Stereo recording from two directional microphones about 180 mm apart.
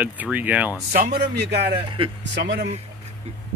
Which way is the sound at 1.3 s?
65° right (ahead or behind).